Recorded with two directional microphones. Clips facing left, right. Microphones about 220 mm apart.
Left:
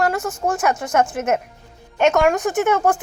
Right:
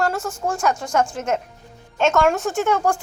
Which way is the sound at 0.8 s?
20° left (ahead or behind).